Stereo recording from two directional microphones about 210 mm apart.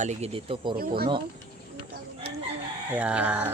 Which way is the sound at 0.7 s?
45° right (ahead or behind).